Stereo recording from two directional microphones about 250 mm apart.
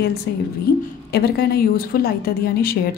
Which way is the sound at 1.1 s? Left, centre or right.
Left.